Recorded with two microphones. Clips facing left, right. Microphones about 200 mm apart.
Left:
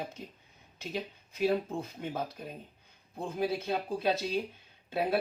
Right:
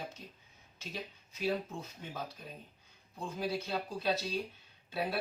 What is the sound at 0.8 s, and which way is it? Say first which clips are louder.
A man's voice: left 7 dB; 55° left (ahead or behind).